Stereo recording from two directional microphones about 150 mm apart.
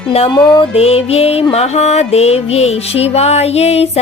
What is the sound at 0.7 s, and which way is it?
Music, 40° left (ahead or behind).